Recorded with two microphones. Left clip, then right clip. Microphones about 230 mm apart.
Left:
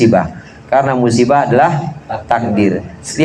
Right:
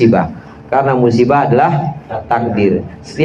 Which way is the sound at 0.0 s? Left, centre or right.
Left.